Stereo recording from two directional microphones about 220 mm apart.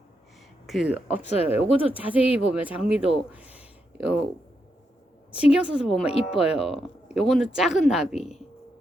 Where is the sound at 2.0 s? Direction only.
5° right (ahead or behind).